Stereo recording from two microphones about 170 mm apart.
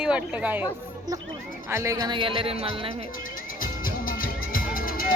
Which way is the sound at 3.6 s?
55° left (ahead or behind).